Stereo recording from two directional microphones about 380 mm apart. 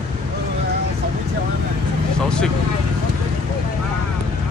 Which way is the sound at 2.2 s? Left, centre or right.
Centre.